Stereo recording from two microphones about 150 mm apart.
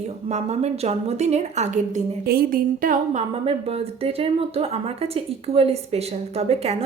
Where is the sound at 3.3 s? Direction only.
40° right (ahead or behind).